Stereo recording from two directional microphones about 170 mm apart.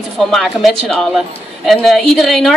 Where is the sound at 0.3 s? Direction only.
Centre (ahead or behind).